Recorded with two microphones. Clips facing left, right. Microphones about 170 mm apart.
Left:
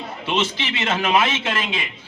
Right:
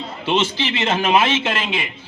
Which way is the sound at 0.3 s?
30° right (ahead or behind).